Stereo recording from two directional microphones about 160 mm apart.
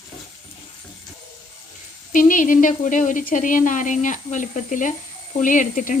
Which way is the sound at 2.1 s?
55° left (ahead or behind).